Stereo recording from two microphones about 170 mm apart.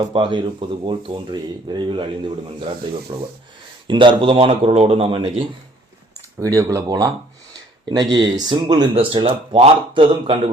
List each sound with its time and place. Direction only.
0.0 s speech: 30° right (ahead or behind)
6.4 s speech: 20° right (ahead or behind)